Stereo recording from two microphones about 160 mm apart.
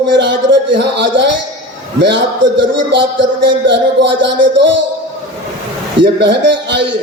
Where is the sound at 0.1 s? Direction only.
90° right.